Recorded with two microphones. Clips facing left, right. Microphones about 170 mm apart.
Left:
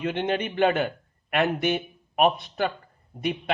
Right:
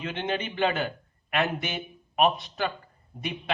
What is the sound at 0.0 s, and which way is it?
A man's voice, 55° left (ahead or behind).